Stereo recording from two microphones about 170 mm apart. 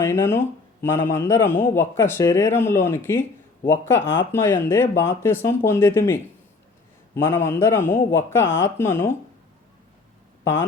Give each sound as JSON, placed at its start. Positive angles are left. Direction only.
{"t": 0.0, "sound": "speech", "side_deg": 15}
{"t": 10.4, "sound": "speech", "side_deg": 15}